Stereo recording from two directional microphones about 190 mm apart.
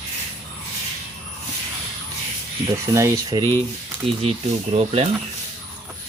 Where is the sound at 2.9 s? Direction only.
15° right (ahead or behind).